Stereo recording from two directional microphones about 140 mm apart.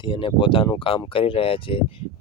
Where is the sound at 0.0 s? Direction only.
35° left (ahead or behind).